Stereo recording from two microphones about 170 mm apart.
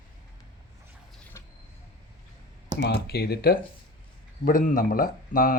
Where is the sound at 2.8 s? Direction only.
75° left (ahead or behind).